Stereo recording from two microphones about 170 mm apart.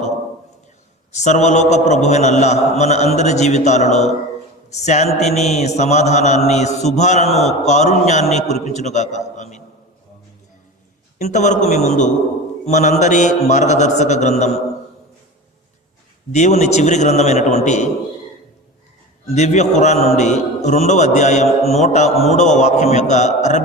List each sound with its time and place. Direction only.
1.1 s speech: 45° left (ahead or behind)
4.7 s mantra: 40° left (ahead or behind)
7.4 s speech: 40° left (ahead or behind)
11.2 s speech: 45° left (ahead or behind)
16.3 s speech: 45° left (ahead or behind)
19.3 s speech: 40° left (ahead or behind)